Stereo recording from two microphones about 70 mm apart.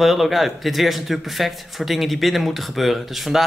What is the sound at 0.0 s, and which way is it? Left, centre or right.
A man's voice, centre.